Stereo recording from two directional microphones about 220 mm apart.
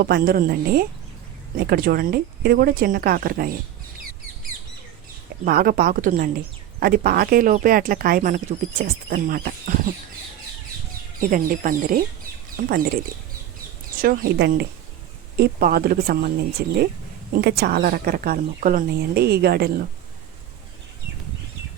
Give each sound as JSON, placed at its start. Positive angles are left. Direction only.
{"t": 0.0, "sound": "a woman's voice", "side_deg": -45}
{"t": 5.5, "sound": "speech", "side_deg": -40}
{"t": 11.2, "sound": "a woman's voice", "side_deg": -40}